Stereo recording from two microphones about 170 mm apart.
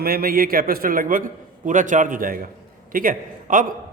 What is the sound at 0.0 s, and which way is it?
A man's voice, 60° right (ahead or behind).